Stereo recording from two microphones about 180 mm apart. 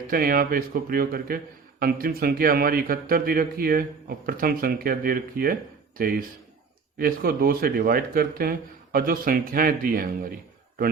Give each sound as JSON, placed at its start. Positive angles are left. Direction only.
{"t": 0.1, "sound": "speech", "side_deg": -55}